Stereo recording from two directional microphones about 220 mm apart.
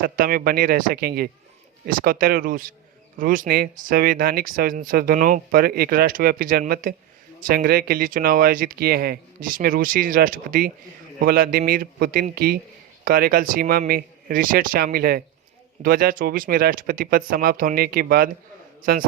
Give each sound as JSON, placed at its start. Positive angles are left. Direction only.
{"t": 0.0, "sound": "a man's voice", "side_deg": -40}